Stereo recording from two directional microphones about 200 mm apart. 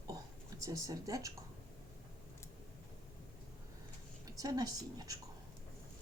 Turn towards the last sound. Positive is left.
turn(degrees=-20)  # may be behind; listen again after turning